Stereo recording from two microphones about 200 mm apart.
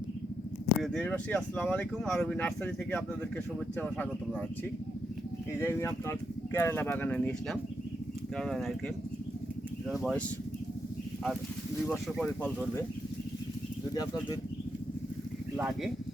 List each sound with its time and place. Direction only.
0.8 s speech: 5° left (ahead or behind)
5.5 s speech: 10° left (ahead or behind)
9.9 s speech: 5° left (ahead or behind)
11.9 s speech: centre (ahead or behind)
13.9 s speech: 20° left (ahead or behind)
15.5 s speech: 5° right (ahead or behind)